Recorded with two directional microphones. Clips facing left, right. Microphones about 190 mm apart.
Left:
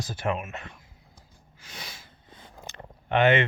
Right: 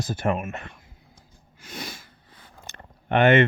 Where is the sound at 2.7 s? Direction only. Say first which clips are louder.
Right 2 dB; 50° right (ahead or behind).